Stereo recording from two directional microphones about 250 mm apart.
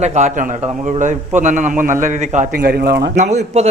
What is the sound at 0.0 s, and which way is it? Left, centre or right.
A man's voice, right.